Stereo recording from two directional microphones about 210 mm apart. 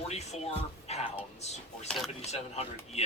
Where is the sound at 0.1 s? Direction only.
30° left (ahead or behind).